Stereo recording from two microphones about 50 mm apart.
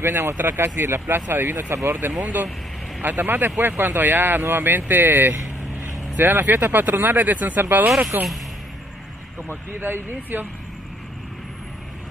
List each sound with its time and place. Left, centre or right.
0.0 s speech: right
1.2 s speech: right
2.1 s speech: right
9.5 s speech: right